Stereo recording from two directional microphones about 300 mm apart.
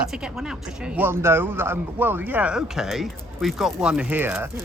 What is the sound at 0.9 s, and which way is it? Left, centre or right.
Speech, centre.